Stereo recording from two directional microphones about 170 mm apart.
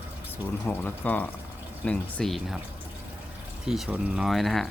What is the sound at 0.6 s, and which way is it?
Speech, 10° left (ahead or behind).